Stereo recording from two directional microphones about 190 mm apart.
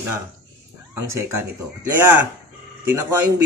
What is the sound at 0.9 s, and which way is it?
Speech, 15° right (ahead or behind).